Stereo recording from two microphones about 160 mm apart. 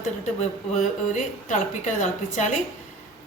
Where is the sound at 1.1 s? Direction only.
50° left (ahead or behind).